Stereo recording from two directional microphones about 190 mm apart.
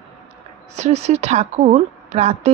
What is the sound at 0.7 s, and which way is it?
Speech, 35° right (ahead or behind).